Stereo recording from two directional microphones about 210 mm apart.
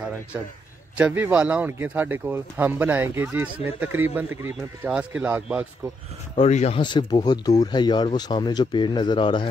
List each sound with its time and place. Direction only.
0.9 s speech: 5° right (ahead or behind)
6.3 s speech: 30° left (ahead or behind)